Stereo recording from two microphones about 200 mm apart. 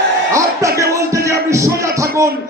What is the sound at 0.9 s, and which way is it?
Music, 15° right (ahead or behind).